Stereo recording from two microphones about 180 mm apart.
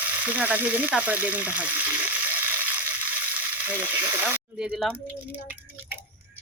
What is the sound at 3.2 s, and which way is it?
Speech, 10° right (ahead or behind).